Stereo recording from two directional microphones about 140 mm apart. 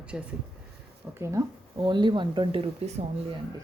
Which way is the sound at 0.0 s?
10° right (ahead or behind).